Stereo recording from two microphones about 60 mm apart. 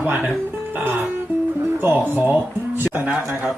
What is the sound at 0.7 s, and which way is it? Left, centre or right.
Music, right.